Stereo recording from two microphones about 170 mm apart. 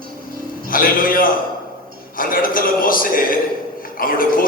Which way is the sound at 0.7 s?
55° left (ahead or behind).